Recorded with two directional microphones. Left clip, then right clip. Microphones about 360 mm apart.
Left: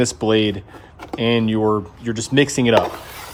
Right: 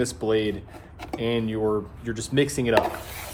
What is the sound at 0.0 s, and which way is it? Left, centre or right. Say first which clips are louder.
Speech: left 6 dB; left.